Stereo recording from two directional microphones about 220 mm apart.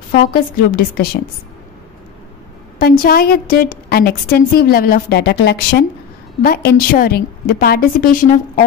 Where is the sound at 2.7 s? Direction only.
40° left (ahead or behind).